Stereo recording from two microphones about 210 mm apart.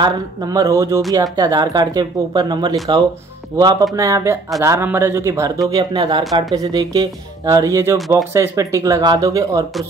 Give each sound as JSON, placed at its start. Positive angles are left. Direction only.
{"t": 0.0, "sound": "speech", "side_deg": -15}